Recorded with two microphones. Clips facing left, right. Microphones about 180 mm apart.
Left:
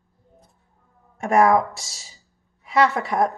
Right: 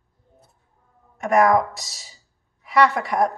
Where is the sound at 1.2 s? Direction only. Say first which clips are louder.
Even; 30° left (ahead or behind).